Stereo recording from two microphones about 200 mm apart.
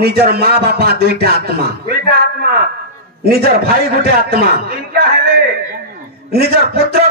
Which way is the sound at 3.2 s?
50° right (ahead or behind).